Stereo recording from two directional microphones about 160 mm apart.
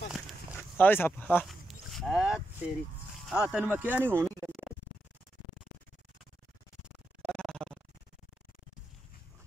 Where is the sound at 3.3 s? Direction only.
5° right (ahead or behind).